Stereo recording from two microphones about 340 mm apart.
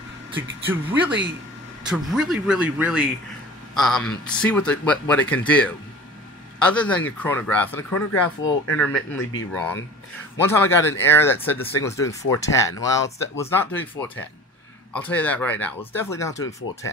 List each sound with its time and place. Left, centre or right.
1.8 s speech: centre
7.9 s speech: left
8.7 s speech: centre
9.2 s speech: left
10.4 s speech: centre